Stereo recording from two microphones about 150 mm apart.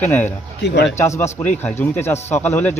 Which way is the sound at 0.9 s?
20° left (ahead or behind).